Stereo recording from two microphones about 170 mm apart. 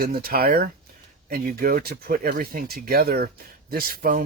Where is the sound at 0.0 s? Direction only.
60° right (ahead or behind).